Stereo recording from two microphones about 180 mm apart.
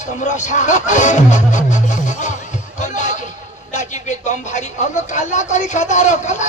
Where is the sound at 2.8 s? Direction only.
45° left (ahead or behind).